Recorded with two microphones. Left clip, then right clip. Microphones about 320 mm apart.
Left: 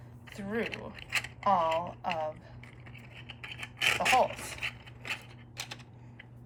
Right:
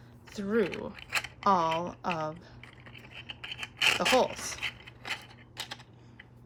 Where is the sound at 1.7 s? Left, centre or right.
Right.